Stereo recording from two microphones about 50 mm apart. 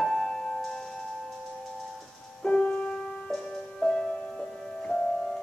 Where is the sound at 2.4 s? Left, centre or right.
Centre.